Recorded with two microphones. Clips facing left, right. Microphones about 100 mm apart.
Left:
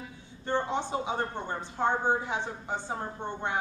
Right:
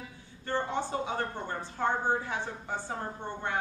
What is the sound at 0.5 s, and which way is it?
Speech, 20° left (ahead or behind).